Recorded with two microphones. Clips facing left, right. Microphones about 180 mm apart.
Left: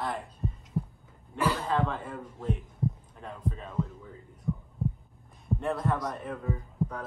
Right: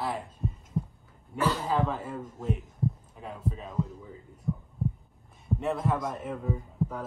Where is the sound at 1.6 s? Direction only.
5° right (ahead or behind).